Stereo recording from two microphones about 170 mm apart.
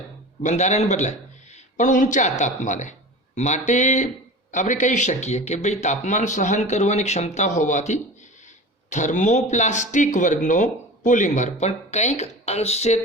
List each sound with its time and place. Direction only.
0.4 s speech: 45° left (ahead or behind)